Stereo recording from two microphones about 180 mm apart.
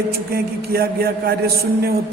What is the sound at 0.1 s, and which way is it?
A man's voice, 55° right (ahead or behind).